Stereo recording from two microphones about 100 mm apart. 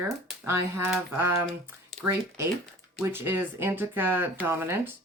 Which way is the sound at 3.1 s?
20° right (ahead or behind).